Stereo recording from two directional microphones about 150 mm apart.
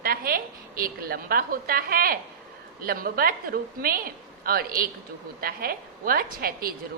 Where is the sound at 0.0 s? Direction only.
75° right (ahead or behind).